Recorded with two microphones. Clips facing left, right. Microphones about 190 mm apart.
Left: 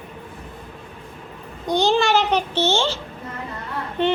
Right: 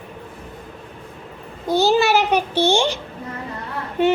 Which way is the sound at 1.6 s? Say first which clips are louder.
Right 2 dB; 5° right (ahead or behind).